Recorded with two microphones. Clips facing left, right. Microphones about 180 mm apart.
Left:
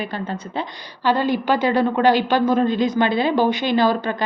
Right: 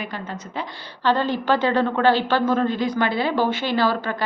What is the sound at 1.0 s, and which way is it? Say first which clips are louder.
A woman's voice: left 2 dB; 10° left (ahead or behind).